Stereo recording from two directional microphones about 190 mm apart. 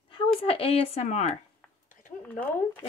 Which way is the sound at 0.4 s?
30° left (ahead or behind).